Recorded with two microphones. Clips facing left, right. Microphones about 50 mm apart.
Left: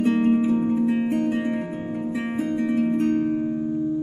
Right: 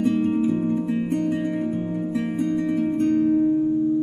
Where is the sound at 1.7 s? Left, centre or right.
Left.